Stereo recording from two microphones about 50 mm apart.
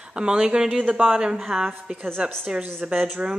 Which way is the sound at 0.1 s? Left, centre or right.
Centre.